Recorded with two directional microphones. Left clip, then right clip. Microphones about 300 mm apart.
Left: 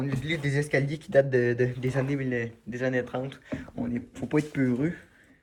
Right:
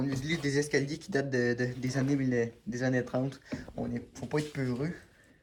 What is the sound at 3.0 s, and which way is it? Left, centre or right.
Speech, centre.